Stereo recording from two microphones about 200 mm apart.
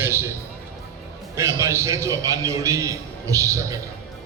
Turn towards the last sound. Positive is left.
turn(degrees=-15)  # may be behind; listen again after turning